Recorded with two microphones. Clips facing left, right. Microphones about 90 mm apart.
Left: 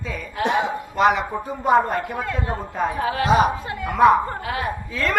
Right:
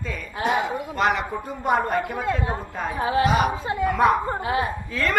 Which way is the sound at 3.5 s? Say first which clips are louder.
Right 4 dB; 25° right (ahead or behind).